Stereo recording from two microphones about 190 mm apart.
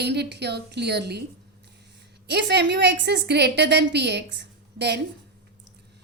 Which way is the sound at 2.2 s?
60° right (ahead or behind).